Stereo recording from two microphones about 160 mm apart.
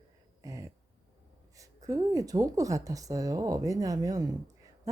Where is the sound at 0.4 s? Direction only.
20° right (ahead or behind).